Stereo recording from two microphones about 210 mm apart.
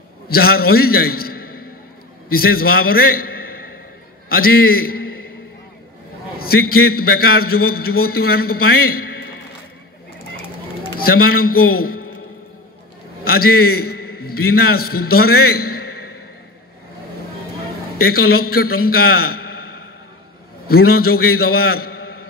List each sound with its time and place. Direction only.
0.3 s a man's voice: 45° left (ahead or behind)
6.4 s a man's voice: 45° left (ahead or behind)
11.3 s a man's voice: 45° left (ahead or behind)
13.2 s a man's voice: 45° left (ahead or behind)
17.9 s a man's voice: 45° left (ahead or behind)